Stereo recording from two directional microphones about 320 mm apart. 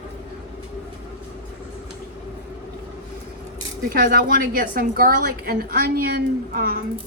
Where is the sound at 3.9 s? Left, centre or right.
Right.